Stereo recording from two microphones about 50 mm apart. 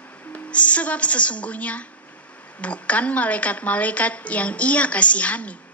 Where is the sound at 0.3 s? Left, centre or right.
Left.